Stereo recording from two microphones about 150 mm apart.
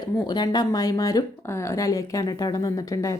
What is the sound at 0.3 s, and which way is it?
Speech, 25° left (ahead or behind).